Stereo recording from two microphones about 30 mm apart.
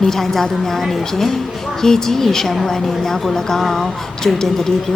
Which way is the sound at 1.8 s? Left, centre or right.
Centre.